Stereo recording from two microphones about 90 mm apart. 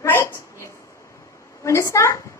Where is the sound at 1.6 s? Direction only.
35° left (ahead or behind).